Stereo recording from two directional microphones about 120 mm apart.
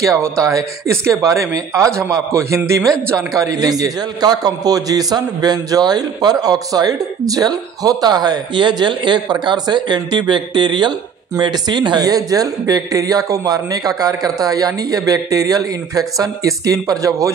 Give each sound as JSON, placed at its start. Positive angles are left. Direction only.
{"t": 0.0, "sound": "a man's voice", "side_deg": -30}